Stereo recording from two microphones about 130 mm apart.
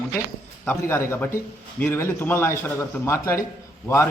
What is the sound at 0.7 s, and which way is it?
A man's voice, 20° left (ahead or behind).